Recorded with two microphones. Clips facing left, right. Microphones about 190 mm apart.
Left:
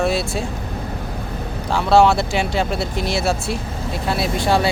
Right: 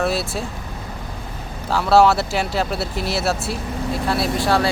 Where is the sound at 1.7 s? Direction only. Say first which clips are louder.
Even; 5° right (ahead or behind).